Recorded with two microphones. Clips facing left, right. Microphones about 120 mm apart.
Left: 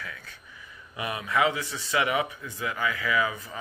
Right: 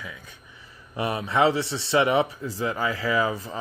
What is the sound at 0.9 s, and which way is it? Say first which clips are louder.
Speech: right 4 dB; 30° right (ahead or behind).